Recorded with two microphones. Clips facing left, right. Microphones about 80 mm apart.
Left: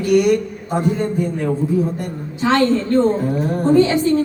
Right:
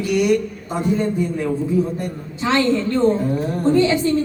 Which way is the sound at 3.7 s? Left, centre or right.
Left.